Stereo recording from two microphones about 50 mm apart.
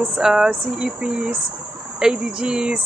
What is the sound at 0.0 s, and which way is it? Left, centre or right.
Speech, centre.